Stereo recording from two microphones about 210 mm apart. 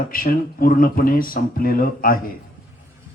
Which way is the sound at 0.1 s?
45° left (ahead or behind).